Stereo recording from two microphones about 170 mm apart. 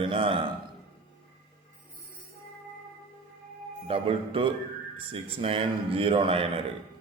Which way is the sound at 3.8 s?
35° right (ahead or behind).